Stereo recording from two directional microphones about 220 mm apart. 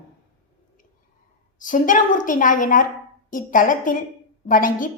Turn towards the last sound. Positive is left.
turn(degrees=40)  # may be behind; listen again after turning